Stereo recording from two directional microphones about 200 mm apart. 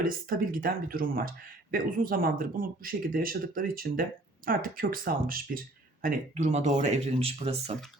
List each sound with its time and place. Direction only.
0.0 s speech: 45° right (ahead or behind)